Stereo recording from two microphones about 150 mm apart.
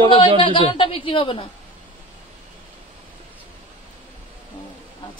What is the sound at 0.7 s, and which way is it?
Speech, 35° left (ahead or behind).